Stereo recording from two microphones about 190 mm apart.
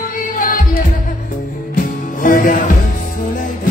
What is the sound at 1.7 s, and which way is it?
Music, 45° left (ahead or behind).